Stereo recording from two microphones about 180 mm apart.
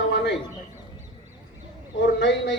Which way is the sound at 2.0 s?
75° left (ahead or behind).